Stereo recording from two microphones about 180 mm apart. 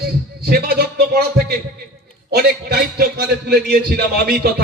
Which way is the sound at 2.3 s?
60° right (ahead or behind).